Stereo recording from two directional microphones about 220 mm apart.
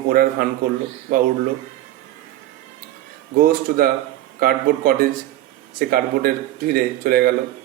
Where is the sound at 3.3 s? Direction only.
40° right (ahead or behind).